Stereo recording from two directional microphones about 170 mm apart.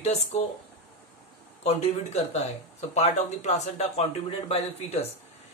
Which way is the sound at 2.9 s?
40° left (ahead or behind).